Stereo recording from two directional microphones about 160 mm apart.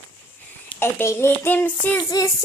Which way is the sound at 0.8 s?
15° left (ahead or behind).